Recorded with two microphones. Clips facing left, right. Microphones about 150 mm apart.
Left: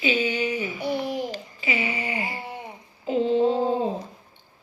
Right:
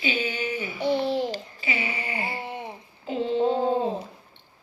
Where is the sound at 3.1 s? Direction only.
35° left (ahead or behind).